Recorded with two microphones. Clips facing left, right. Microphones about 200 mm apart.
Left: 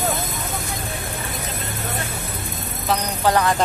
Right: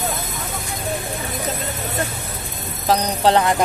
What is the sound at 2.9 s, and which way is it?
Speech, 30° right (ahead or behind).